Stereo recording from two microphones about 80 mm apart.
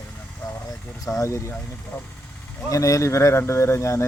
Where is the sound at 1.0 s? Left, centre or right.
Left.